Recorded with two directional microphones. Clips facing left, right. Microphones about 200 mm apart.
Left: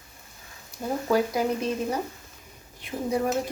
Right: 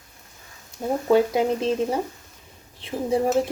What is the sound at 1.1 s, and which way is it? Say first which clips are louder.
A woman's voice: right 5 dB; 25° right (ahead or behind).